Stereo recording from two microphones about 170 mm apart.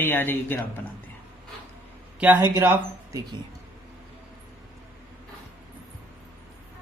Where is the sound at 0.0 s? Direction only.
10° left (ahead or behind).